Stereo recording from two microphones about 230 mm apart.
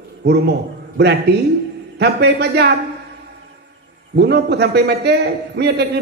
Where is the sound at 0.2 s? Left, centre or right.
Right.